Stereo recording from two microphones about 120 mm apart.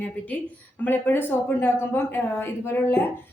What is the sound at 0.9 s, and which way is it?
A woman's voice, 15° left (ahead or behind).